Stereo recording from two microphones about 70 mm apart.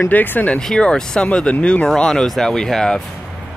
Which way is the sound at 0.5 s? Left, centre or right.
Centre.